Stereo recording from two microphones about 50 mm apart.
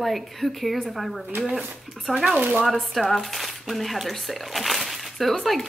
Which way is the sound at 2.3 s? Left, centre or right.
Right.